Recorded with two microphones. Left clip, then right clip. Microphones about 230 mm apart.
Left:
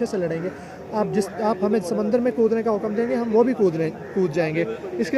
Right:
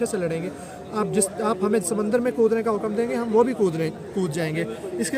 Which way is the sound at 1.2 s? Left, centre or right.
Right.